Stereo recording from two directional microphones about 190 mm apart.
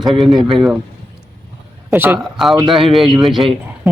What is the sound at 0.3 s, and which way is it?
Speech, 25° right (ahead or behind).